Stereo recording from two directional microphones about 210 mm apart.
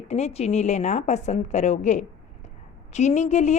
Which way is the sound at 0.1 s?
30° left (ahead or behind).